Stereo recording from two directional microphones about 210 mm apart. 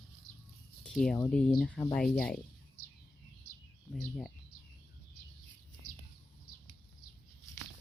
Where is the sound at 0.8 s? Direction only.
Centre (ahead or behind).